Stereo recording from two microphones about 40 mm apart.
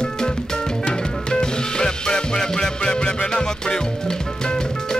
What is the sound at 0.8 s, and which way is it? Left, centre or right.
Music, left.